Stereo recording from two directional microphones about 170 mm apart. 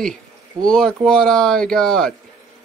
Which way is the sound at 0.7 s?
Centre (ahead or behind).